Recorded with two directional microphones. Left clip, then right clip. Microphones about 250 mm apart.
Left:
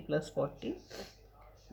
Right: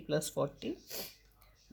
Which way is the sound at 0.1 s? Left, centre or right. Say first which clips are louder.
Even; right.